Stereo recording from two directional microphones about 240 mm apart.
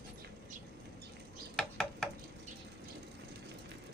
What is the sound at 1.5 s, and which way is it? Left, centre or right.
Bird, centre.